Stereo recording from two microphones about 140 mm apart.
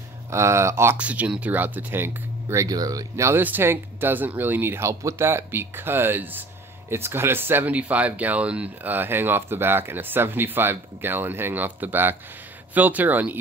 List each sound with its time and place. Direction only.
0.3 s speech: 20° right (ahead or behind)